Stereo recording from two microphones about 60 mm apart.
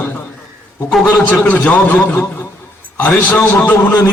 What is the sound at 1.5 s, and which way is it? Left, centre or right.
Speech, left.